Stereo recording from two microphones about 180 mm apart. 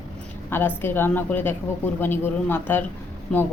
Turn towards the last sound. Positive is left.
turn(degrees=5)  # may be behind; listen again after turning